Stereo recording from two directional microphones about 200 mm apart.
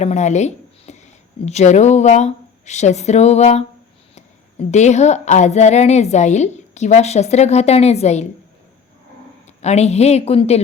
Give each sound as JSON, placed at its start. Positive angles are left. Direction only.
{"t": 0.0, "sound": "speech", "side_deg": 35}
{"t": 9.5, "sound": "speech", "side_deg": 35}